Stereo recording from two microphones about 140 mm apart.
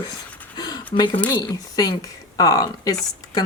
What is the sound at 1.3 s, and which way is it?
A woman's voice, 30° left (ahead or behind).